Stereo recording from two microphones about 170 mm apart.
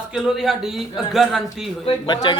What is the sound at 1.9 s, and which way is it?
Speech, 25° left (ahead or behind).